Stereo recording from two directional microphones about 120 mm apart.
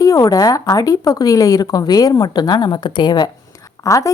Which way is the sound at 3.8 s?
25° left (ahead or behind).